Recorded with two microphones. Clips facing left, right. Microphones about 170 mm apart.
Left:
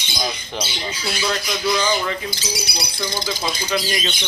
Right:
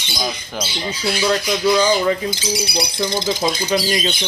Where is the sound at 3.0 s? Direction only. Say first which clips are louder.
Right 5 dB; 20° right (ahead or behind).